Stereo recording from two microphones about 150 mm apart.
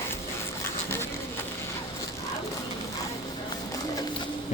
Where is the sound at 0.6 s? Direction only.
15° left (ahead or behind).